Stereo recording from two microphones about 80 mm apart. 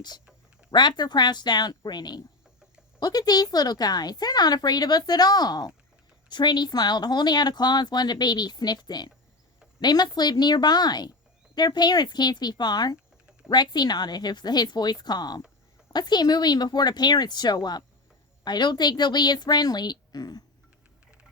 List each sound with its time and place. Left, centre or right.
0.7 s speech: left